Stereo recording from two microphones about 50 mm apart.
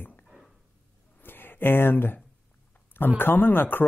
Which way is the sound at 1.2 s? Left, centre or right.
Left.